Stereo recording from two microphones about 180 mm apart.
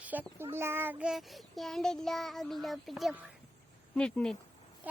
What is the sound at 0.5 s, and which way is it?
Child singing, 15° right (ahead or behind).